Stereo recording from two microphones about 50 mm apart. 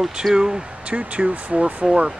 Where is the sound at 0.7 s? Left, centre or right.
Right.